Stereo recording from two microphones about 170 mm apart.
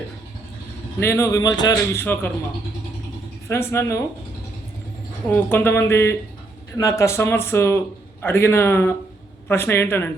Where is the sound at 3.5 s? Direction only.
15° left (ahead or behind).